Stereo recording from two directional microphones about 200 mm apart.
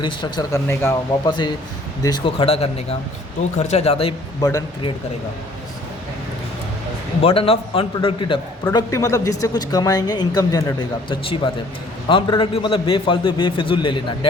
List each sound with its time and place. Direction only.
0.0 s speech: 20° left (ahead or behind)
4.4 s speech: 15° left (ahead or behind)
7.2 s speech: 30° left (ahead or behind)